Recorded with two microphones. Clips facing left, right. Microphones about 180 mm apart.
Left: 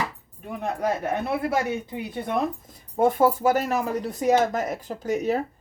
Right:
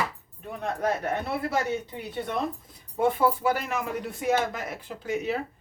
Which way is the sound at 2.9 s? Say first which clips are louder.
Left 4 dB; 45° left (ahead or behind).